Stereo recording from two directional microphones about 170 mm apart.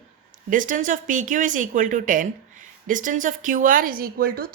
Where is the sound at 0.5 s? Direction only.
50° right (ahead or behind).